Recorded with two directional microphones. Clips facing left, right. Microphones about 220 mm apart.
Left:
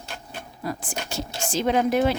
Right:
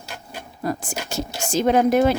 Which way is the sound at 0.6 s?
45° right (ahead or behind).